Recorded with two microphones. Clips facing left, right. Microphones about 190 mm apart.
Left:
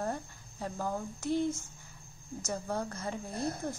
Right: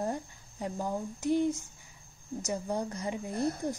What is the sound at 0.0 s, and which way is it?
Speech, 15° right (ahead or behind).